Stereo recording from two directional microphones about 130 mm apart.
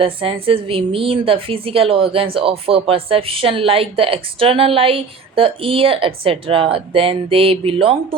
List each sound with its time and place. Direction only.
0.0 s a woman's voice: 45° right (ahead or behind)